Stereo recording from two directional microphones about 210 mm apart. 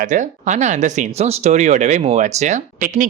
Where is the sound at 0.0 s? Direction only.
35° right (ahead or behind).